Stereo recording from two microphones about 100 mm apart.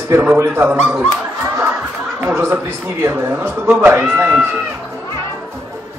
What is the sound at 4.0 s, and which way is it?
Speech, 10° right (ahead or behind).